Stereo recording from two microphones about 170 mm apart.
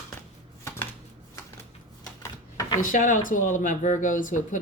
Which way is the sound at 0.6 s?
15° left (ahead or behind).